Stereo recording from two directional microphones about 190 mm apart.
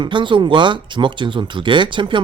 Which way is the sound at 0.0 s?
25° right (ahead or behind).